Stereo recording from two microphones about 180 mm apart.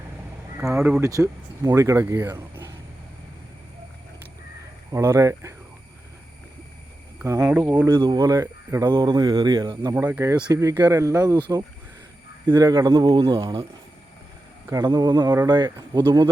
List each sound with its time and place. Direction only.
0.8 s speech: 5° right (ahead or behind)
1.0 s speech: 20° right (ahead or behind)
4.9 s speech: 15° right (ahead or behind)
7.2 s speech: 10° right (ahead or behind)
9.9 s speech: 10° right (ahead or behind); by 13.6 s 30° right (ahead or behind)
14.7 s speech: 20° right (ahead or behind)